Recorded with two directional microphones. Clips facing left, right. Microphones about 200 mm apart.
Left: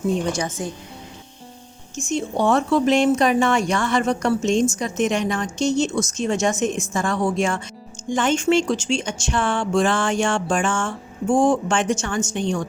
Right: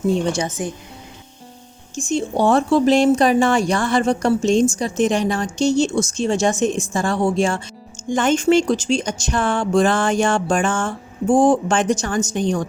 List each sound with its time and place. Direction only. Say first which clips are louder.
2.0 s speech: right 3 dB; 35° right (ahead or behind)
8.1 s speech: right 3 dB; 40° right (ahead or behind)